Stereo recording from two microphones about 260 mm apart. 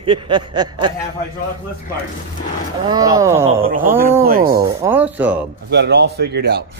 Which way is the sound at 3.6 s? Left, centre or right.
Right.